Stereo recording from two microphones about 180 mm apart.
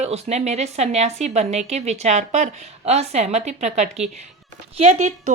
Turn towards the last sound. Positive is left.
turn(degrees=-40)  # may be behind; listen again after turning